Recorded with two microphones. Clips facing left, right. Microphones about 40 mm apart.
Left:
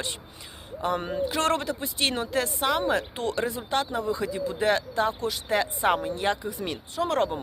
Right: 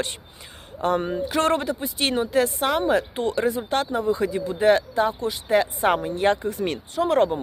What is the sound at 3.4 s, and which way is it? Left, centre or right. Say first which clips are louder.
Speech: right 5 dB; right.